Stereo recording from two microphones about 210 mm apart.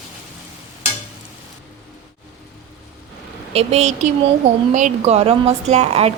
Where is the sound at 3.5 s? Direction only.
30° right (ahead or behind).